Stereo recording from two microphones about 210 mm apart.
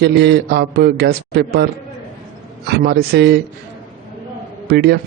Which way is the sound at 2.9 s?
50° right (ahead or behind).